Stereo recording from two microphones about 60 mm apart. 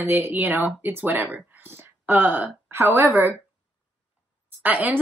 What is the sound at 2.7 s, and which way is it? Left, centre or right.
Speech, right.